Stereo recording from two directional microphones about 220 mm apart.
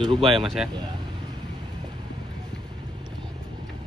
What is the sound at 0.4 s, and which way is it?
Speech, centre (ahead or behind).